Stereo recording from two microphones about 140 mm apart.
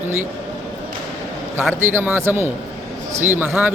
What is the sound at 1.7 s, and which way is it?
Speech, 15° right (ahead or behind).